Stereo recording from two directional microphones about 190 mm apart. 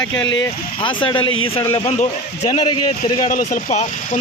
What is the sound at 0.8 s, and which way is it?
Speech, 25° left (ahead or behind).